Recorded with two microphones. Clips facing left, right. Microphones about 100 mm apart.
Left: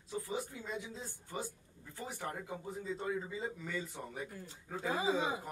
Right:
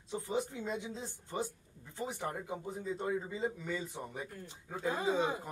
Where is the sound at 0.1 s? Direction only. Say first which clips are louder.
Right 4 dB; 20° right (ahead or behind).